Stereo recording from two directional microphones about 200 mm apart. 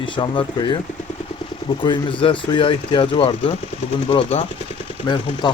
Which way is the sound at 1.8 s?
25° left (ahead or behind).